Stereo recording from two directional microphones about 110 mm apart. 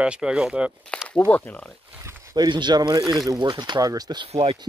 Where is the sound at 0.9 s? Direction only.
10° left (ahead or behind).